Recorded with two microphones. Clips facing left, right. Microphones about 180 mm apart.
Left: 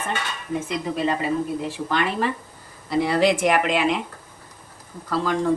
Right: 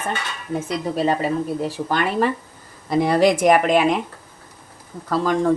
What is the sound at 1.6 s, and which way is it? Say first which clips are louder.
Speech: right 2 dB; 45° right (ahead or behind).